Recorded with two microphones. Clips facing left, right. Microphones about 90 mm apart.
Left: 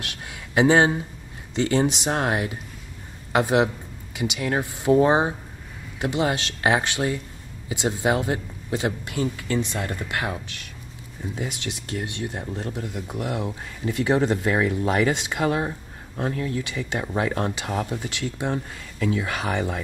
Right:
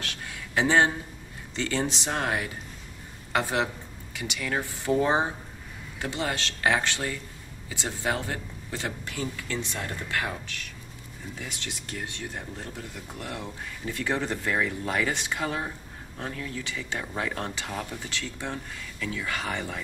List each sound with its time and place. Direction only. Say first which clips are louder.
0.0 s speech: left 1 dB; 15° left (ahead or behind)
16.2 s speech: left 8 dB; 35° left (ahead or behind)
16.6 s speech: left 5 dB; 15° left (ahead or behind)
17.6 s speech: left 7 dB; 30° left (ahead or behind)
17.9 s speech: left 6 dB; 20° left (ahead or behind)